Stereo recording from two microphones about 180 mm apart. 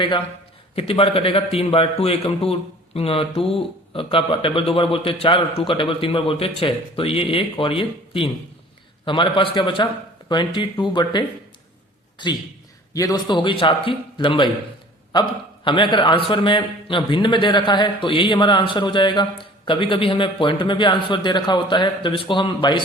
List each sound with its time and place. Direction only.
0.8 s a man's voice: 30° left (ahead or behind)
15.6 s a man's voice: 25° left (ahead or behind)